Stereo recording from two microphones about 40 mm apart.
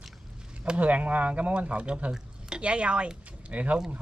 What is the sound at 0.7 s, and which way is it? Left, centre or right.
Speech, right.